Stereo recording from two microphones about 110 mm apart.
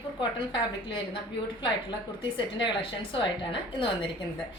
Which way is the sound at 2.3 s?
50° left (ahead or behind).